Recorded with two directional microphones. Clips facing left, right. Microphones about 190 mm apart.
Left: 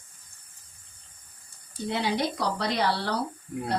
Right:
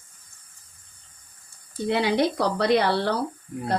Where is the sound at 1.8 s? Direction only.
65° right (ahead or behind).